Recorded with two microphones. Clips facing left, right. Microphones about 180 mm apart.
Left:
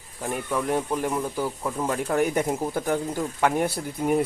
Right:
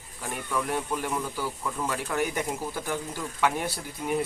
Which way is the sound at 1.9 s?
35° left (ahead or behind).